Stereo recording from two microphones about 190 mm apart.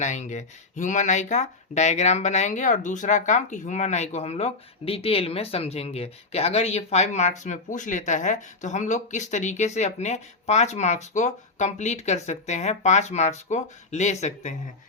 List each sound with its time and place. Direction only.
0.0 s speech: 40° left (ahead or behind)